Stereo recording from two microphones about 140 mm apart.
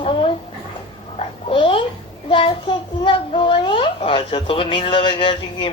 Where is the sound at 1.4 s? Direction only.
40° left (ahead or behind).